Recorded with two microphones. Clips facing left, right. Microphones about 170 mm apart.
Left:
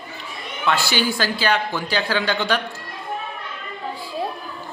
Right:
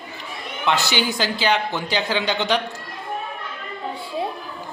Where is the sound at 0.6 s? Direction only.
20° right (ahead or behind).